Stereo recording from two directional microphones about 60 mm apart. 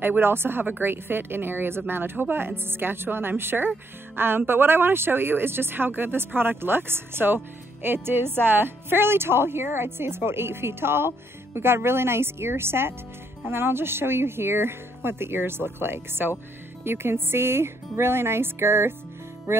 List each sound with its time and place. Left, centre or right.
0.0 s a woman's voice: right